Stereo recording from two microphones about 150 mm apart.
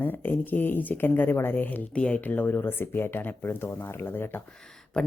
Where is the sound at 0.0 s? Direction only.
15° left (ahead or behind).